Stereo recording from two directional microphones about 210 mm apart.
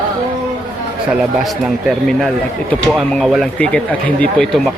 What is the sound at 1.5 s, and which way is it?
Speech, centre (ahead or behind).